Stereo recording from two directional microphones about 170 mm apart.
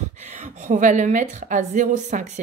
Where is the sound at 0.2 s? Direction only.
45° right (ahead or behind).